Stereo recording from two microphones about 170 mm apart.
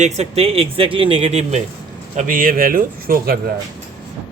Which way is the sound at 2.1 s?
55° right (ahead or behind).